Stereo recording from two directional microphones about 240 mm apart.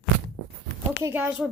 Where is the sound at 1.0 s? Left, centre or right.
Centre.